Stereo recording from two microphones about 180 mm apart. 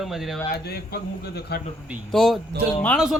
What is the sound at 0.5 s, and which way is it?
A man's voice, 60° left (ahead or behind).